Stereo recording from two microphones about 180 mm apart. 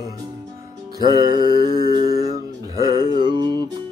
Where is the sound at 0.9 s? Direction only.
20° right (ahead or behind).